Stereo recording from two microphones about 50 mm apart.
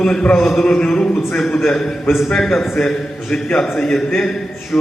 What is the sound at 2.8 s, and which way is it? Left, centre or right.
A man's voice, centre.